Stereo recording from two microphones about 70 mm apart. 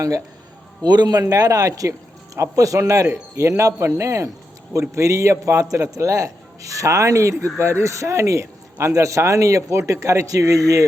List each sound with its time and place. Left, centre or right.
0.9 s speech: right